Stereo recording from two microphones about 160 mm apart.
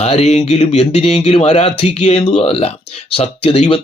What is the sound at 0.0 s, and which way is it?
Speech, 40° left (ahead or behind).